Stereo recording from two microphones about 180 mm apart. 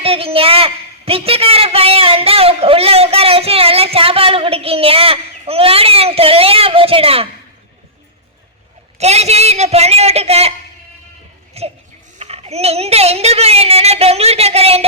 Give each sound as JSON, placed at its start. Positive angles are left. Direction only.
{"t": 0.0, "sound": "a man's voice", "side_deg": -30}
{"t": 9.0, "sound": "a man's voice", "side_deg": -35}
{"t": 11.6, "sound": "a man's voice", "side_deg": -35}